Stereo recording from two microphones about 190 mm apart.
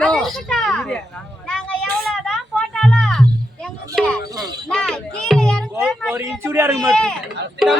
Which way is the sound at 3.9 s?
Centre (ahead or behind).